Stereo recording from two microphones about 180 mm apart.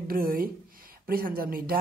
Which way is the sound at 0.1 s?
55° right (ahead or behind).